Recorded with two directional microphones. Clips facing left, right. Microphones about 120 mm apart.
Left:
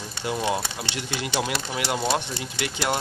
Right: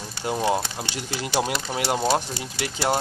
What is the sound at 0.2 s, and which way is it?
Speech, 40° right (ahead or behind).